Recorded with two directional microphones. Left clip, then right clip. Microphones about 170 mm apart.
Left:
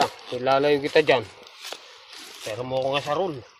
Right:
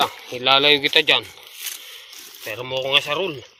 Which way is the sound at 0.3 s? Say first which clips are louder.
Right 6 dB; 30° left (ahead or behind).